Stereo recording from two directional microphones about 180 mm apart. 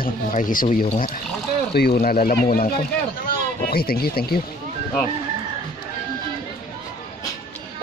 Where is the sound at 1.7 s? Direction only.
60° left (ahead or behind).